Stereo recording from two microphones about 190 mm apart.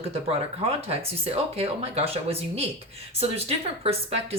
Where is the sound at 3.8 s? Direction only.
30° right (ahead or behind).